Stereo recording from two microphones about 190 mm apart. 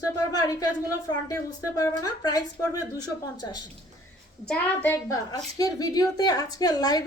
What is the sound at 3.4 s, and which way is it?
Speech, 20° left (ahead or behind).